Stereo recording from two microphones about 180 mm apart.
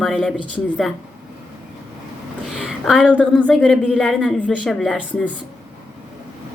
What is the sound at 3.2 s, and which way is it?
A woman's voice, 5° left (ahead or behind).